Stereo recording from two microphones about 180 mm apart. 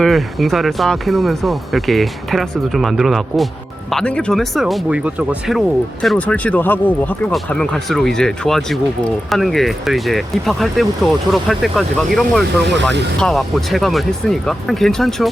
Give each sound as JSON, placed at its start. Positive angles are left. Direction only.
{"t": 0.0, "sound": "speech", "side_deg": 0}
{"t": 12.6, "sound": "speech", "side_deg": -75}
{"t": 13.1, "sound": "speech", "side_deg": 0}